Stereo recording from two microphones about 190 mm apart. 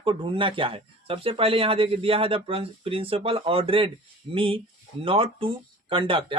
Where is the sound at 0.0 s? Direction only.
30° right (ahead or behind).